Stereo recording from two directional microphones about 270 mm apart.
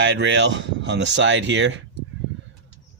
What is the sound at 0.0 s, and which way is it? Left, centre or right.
Speech, right.